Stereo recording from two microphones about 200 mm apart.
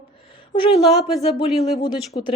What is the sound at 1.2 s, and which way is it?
Speech, 30° left (ahead or behind).